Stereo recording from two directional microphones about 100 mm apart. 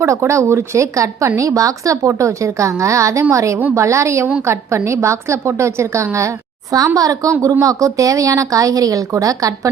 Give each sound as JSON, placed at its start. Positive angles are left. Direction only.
{"t": 0.0, "sound": "a woman's voice", "side_deg": -30}